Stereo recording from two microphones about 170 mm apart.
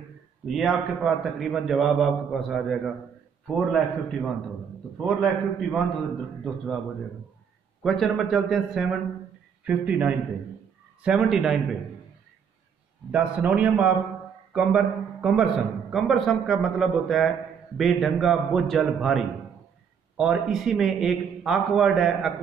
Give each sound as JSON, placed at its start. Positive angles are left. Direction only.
{"t": 0.5, "sound": "a man's voice", "side_deg": 0}
{"t": 7.8, "sound": "a man's voice", "side_deg": 0}
{"t": 13.1, "sound": "a man's voice", "side_deg": -10}